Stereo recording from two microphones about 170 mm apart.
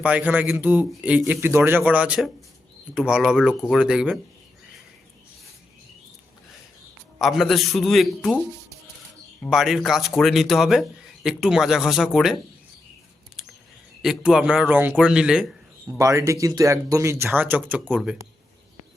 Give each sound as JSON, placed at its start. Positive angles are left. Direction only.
{"t": 0.0, "sound": "speech", "side_deg": -10}
{"t": 7.2, "sound": "speech", "side_deg": 0}
{"t": 9.4, "sound": "speech", "side_deg": 0}
{"t": 14.0, "sound": "speech", "side_deg": 0}
{"t": 16.0, "sound": "speech", "side_deg": -20}